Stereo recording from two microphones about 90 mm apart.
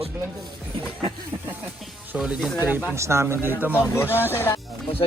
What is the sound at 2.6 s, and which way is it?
Speech, 20° right (ahead or behind).